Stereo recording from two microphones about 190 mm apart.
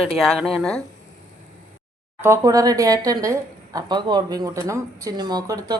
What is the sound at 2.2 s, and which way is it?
A woman's voice, 15° right (ahead or behind).